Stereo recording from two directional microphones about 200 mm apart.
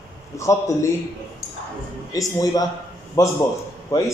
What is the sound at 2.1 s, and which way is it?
A man's voice, 15° left (ahead or behind).